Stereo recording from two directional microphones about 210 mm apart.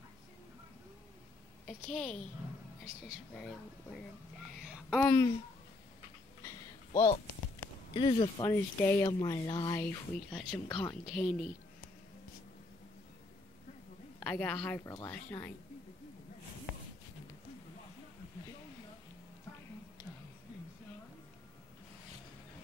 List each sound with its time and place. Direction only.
1.7 s a woman's voice: 5° left (ahead or behind)
3.3 s speech: 5° left (ahead or behind)
6.4 s a sound: 15° left (ahead or behind)
7.9 s speech: 25° left (ahead or behind)
8.5 s speech: 10° left (ahead or behind)
14.2 s speech: 5° left (ahead or behind)